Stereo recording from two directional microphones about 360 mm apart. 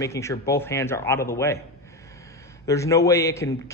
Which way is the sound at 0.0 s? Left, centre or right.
Centre.